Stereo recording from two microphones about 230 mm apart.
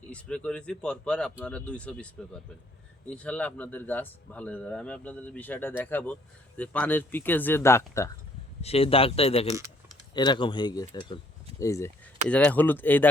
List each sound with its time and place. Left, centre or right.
0.1 s speech: centre
8.6 s speech: left
9.5 s speech: centre
10.2 s speech: centre